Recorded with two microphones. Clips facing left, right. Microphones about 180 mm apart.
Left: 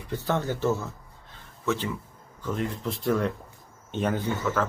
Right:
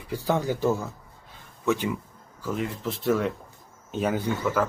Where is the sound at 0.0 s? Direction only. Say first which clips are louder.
Right 2 dB; 10° right (ahead or behind).